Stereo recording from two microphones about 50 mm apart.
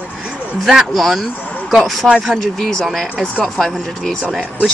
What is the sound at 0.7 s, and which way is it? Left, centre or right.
Speech, centre.